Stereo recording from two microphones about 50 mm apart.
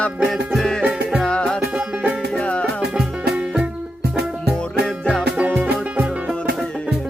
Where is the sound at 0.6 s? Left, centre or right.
Centre.